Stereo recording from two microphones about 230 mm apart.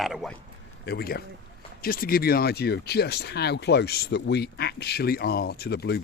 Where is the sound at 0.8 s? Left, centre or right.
Left.